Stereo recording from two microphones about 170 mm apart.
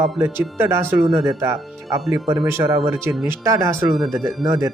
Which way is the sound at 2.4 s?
15° right (ahead or behind).